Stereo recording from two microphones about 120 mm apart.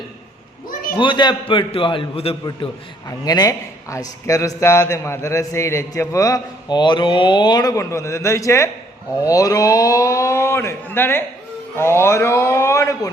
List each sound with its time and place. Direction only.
0.9 s a man's voice: 40° left (ahead or behind)
3.1 s a man's voice: 30° left (ahead or behind)